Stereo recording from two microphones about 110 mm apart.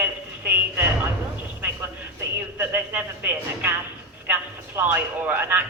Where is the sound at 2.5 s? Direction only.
15° right (ahead or behind).